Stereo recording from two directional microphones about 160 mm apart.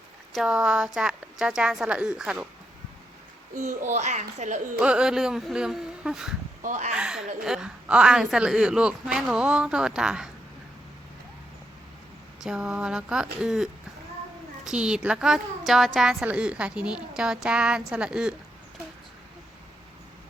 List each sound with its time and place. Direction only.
0.3 s a woman's voice: 5° right (ahead or behind)
3.5 s a child's voice: 50° right (ahead or behind)
4.8 s a woman's voice: 5° right (ahead or behind)
6.6 s speech: 50° right (ahead or behind)
6.9 s a woman's voice: 5° right (ahead or behind)
12.4 s a woman's voice: 5° right (ahead or behind)